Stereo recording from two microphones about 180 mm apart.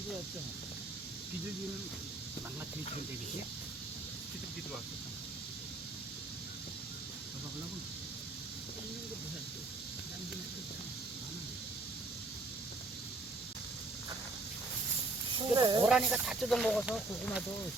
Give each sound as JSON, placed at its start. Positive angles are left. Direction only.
{"t": 15.4, "sound": "snake", "side_deg": -25}
{"t": 15.9, "sound": "speech", "side_deg": -5}